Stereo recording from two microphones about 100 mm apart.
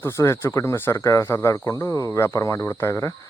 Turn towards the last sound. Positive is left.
turn(degrees=30)  # may be behind; listen again after turning